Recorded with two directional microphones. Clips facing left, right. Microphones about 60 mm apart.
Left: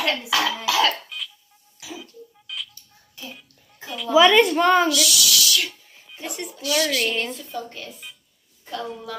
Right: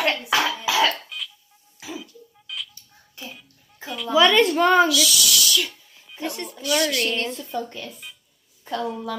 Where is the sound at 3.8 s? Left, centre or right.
Centre.